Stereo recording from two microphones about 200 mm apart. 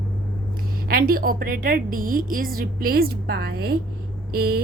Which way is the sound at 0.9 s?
45° right (ahead or behind).